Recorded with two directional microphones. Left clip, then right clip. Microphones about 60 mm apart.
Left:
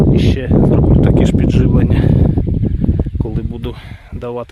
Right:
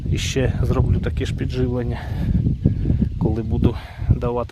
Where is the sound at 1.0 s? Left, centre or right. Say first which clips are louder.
Left 13 dB; left.